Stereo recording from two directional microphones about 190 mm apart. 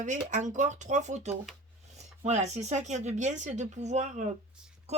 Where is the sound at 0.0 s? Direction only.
40° right (ahead or behind).